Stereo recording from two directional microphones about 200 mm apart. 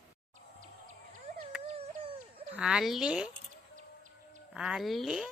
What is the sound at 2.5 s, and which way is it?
Speech, 5° right (ahead or behind).